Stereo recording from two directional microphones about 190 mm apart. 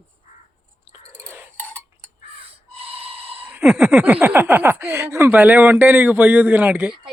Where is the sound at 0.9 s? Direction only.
10° right (ahead or behind).